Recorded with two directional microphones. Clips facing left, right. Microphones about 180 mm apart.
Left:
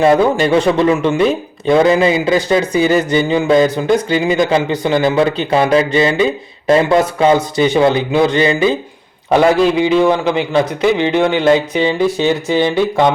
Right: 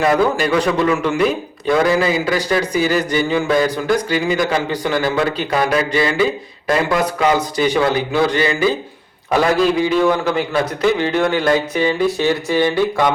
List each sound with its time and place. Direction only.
0.0 s speech: 25° left (ahead or behind)
9.8 s speech: 20° left (ahead or behind)